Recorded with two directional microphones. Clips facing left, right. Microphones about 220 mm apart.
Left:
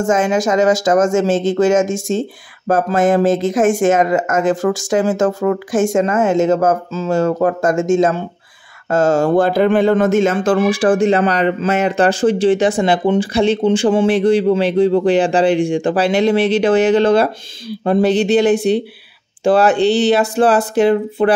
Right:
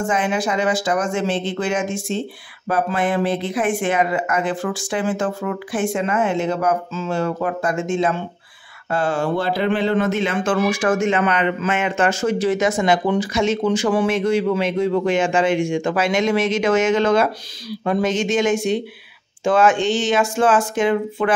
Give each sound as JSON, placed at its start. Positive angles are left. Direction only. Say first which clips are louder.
{"t": 0.0, "sound": "speech", "louder": "left 6 dB", "side_deg": 45}